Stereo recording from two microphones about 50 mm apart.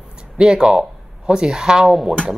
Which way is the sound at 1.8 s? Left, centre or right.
Centre.